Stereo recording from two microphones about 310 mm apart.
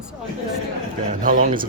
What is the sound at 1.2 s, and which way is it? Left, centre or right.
Speech, right.